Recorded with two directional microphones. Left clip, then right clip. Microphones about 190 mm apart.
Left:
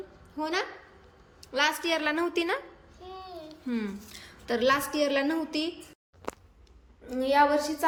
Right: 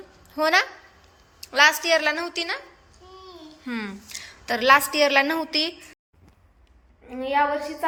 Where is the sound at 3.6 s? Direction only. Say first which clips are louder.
Right 3 dB; 5° left (ahead or behind).